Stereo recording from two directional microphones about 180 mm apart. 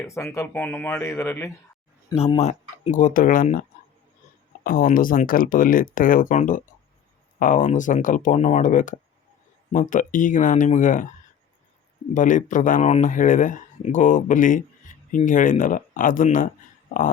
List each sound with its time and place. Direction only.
0.0 s speech: 15° left (ahead or behind)
2.1 s speech: 35° left (ahead or behind)
12.1 s speech: 45° left (ahead or behind)